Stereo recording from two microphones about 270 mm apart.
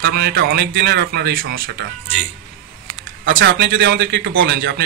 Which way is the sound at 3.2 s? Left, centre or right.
Right.